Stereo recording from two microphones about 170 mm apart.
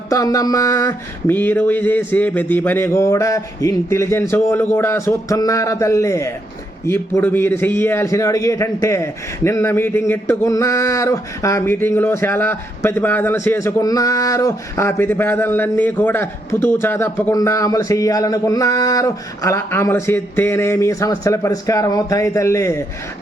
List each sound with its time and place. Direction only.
0.1 s a man's voice: 20° left (ahead or behind)